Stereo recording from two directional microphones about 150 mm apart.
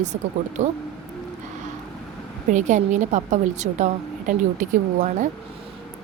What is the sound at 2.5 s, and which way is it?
Speech, 55° right (ahead or behind).